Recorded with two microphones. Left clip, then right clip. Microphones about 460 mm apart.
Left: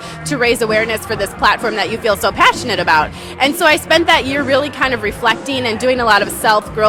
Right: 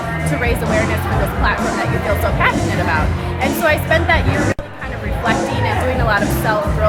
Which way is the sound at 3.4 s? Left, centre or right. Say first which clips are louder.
Left 4 dB; left.